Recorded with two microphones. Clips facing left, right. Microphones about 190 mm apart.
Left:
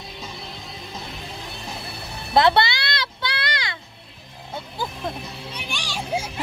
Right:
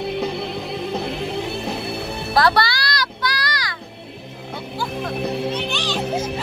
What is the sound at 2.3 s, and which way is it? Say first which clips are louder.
Music: left 1 dB; 25° left (ahead or behind).